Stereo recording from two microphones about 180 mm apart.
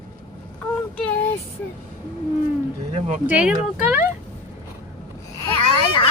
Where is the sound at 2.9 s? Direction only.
40° right (ahead or behind).